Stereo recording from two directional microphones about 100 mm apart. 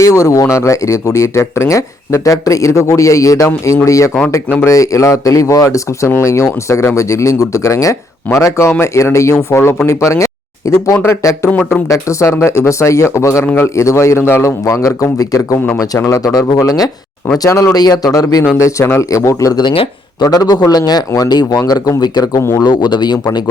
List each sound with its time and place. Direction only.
0.0 s speech: 30° left (ahead or behind)
11.4 s speech: 5° left (ahead or behind)
11.9 s speech: 30° left (ahead or behind)
19.6 s speech: 65° left (ahead or behind)
20.2 s speech: 40° left (ahead or behind)